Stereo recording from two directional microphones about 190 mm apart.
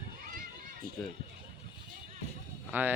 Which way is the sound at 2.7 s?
10° right (ahead or behind).